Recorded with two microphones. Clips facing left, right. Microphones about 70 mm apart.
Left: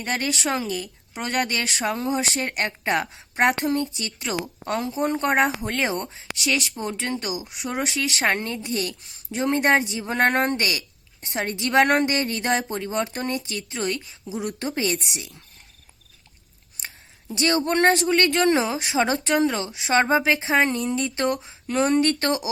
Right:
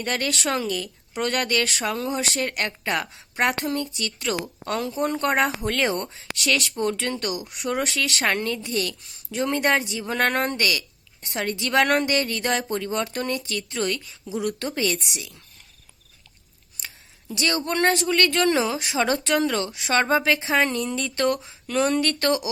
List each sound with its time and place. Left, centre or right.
0.0 s a woman's voice: left
1.5 s a woman's voice: left
5.6 s speech: centre
7.9 s a woman's voice: left
16.8 s a woman's voice: left
20.3 s speech: left
21.2 s a woman's voice: left